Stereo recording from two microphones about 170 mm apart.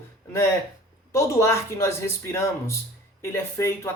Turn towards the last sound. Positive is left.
turn(degrees=15)  # may be behind; listen again after turning